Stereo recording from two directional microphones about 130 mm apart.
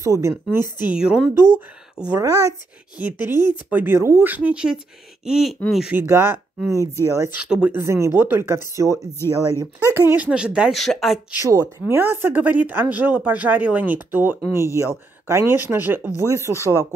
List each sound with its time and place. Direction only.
0.0 s speech: 20° right (ahead or behind)
0.9 s speech: 5° right (ahead or behind)
2.1 s speech: 25° right (ahead or behind); by 5.9 s 5° right (ahead or behind)
5.9 s speech: 20° right (ahead or behind)
7.3 s speech: 5° right (ahead or behind)
7.8 s speech: 20° right (ahead or behind); by 11.1 s centre (ahead or behind)
11.3 s speech: 25° right (ahead or behind)